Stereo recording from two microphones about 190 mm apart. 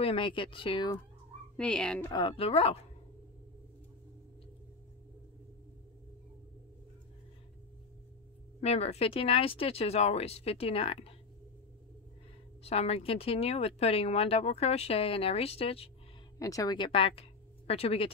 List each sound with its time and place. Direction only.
0.0 s speech: 25° left (ahead or behind)
1.6 s speech: 5° left (ahead or behind)
2.0 s speech: 25° left (ahead or behind)
8.5 s speech: 35° left (ahead or behind)
12.6 s speech: 30° left (ahead or behind)
16.3 s speech: 15° left (ahead or behind)